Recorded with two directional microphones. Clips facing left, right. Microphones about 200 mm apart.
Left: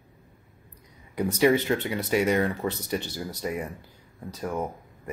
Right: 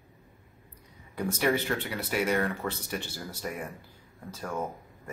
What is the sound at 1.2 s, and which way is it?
Speech, 10° left (ahead or behind).